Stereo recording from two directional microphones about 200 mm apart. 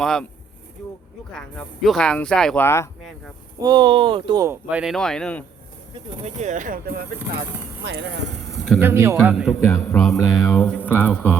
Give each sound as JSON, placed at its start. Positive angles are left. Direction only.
{"t": 0.0, "sound": "speech", "side_deg": 0}
{"t": 1.3, "sound": "speech", "side_deg": 5}
{"t": 3.6, "sound": "speech", "side_deg": -20}
{"t": 4.7, "sound": "speech", "side_deg": -5}
{"t": 5.9, "sound": "speech", "side_deg": -35}
{"t": 7.9, "sound": "speech", "side_deg": -65}
{"t": 8.4, "sound": "a sound", "side_deg": 0}
{"t": 8.9, "sound": "a man's voice", "side_deg": -15}
{"t": 9.1, "sound": "speech", "side_deg": -5}
{"t": 9.6, "sound": "mantra", "side_deg": 15}